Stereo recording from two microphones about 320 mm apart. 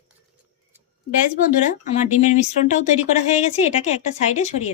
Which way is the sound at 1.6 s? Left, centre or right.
Left.